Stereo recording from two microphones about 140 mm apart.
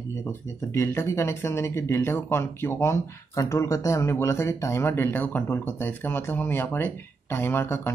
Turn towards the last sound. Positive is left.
turn(degrees=15)  # may be behind; listen again after turning